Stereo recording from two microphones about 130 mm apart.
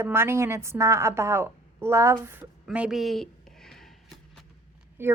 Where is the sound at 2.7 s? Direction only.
5° right (ahead or behind).